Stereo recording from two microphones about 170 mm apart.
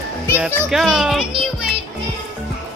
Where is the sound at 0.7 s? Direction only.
Centre (ahead or behind).